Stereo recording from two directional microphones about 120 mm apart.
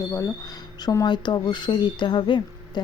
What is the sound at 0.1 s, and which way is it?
Speech, 30° left (ahead or behind).